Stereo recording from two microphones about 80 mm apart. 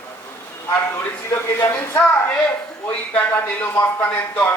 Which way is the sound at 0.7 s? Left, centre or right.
Left.